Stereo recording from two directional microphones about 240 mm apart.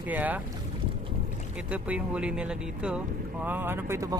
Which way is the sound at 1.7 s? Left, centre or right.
Centre.